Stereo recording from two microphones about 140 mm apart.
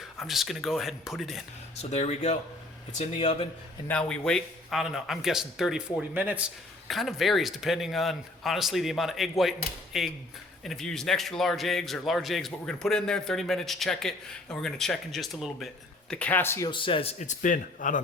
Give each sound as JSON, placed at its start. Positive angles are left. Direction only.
{"t": 0.2, "sound": "a man's voice", "side_deg": 0}
{"t": 1.8, "sound": "speech", "side_deg": 50}
{"t": 3.8, "sound": "a man's voice", "side_deg": 5}
{"t": 6.8, "sound": "a man's voice", "side_deg": 0}
{"t": 16.6, "sound": "speech", "side_deg": 35}